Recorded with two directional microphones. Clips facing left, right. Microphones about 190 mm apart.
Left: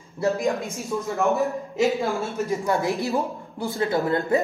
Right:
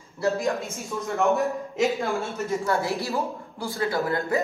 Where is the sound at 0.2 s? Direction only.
15° left (ahead or behind).